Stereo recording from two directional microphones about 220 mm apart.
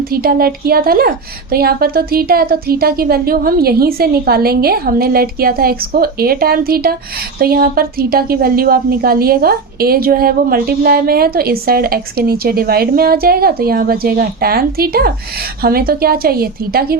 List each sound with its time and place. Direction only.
0.1 s a woman's voice: 45° right (ahead or behind)